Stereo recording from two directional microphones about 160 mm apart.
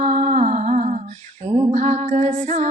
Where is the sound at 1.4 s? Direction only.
45° right (ahead or behind).